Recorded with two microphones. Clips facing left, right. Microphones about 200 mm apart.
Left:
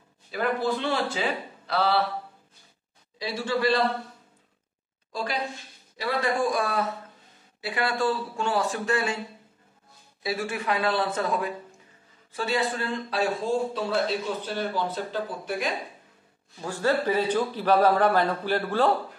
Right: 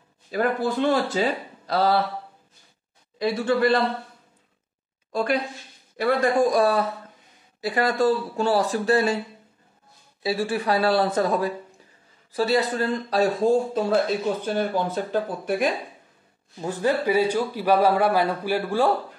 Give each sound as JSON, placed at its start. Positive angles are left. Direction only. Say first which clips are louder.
{"t": 0.3, "sound": "speech", "louder": "right 3 dB", "side_deg": -45}
{"t": 3.2, "sound": "speech", "louder": "right 6 dB", "side_deg": -55}
{"t": 5.1, "sound": "a woman's voice", "louder": "right 6 dB", "side_deg": -55}
{"t": 10.2, "sound": "speech", "louder": "right 5 dB", "side_deg": -30}
{"t": 16.6, "sound": "a man's voice", "louder": "right 2 dB", "side_deg": -15}